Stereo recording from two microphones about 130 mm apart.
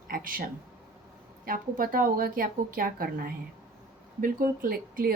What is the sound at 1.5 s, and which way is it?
Speech, 90° right.